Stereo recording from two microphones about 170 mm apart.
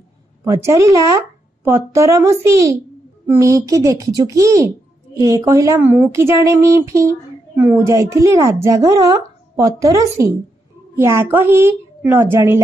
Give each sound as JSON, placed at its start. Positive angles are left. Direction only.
{"t": 0.4, "sound": "speech", "side_deg": -15}